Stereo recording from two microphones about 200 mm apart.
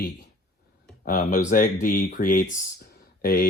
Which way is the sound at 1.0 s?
40° left (ahead or behind).